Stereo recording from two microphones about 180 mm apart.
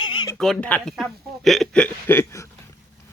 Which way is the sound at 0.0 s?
25° left (ahead or behind).